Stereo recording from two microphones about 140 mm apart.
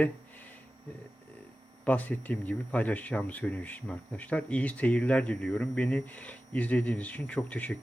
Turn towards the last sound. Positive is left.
turn(degrees=10)  # may be behind; listen again after turning